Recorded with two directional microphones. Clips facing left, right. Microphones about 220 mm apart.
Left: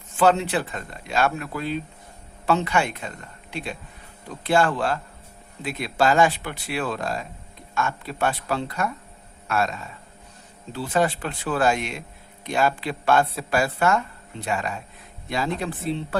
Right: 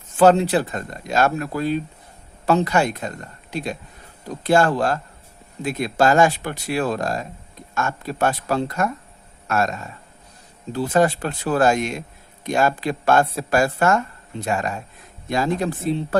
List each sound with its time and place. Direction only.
0.2 s speech: 40° right (ahead or behind)